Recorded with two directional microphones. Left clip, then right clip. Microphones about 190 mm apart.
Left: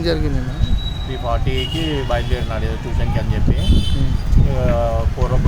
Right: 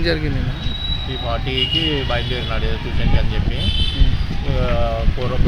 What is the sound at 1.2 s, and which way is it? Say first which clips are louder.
Speech: right 1 dB; 10° left (ahead or behind).